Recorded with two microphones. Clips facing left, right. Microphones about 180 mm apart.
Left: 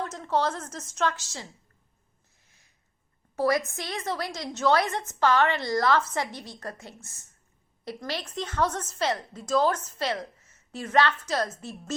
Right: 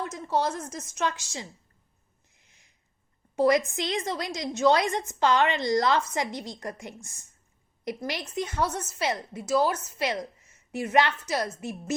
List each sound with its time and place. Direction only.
0.0 s a woman's voice: 10° right (ahead or behind)
3.3 s a woman's voice: 20° right (ahead or behind)